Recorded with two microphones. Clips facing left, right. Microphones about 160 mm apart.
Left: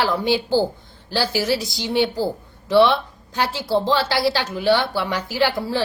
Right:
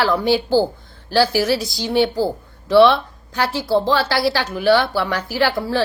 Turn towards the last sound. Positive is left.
turn(degrees=20)  # may be behind; listen again after turning